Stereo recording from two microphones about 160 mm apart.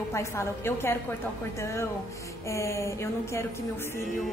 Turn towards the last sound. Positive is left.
turn(degrees=15)  # may be behind; listen again after turning